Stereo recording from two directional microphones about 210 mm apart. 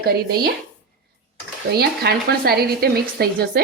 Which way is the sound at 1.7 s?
50° right (ahead or behind).